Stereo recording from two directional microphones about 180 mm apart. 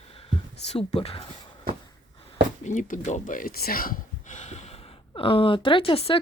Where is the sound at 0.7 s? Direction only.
35° left (ahead or behind).